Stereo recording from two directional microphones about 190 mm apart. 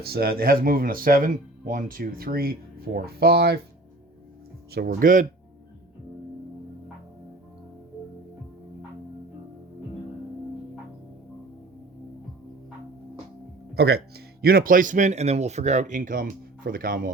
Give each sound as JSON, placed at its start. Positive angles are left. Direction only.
{"t": 0.0, "sound": "speech", "side_deg": -55}
{"t": 4.7, "sound": "speech", "side_deg": -55}
{"t": 13.7, "sound": "speech", "side_deg": -60}